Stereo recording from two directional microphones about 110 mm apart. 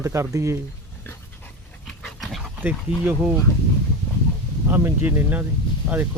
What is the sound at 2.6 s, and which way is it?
Speech, 15° right (ahead or behind).